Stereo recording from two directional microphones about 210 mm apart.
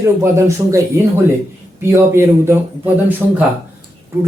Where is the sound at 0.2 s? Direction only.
15° right (ahead or behind).